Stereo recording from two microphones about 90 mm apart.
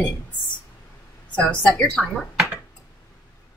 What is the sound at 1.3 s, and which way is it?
Speech, 15° left (ahead or behind).